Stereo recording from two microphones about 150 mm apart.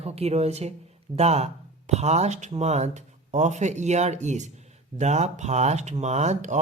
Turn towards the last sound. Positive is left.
turn(degrees=-50)  # may be behind; listen again after turning